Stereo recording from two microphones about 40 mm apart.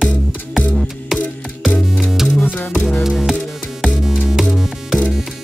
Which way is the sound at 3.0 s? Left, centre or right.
Centre.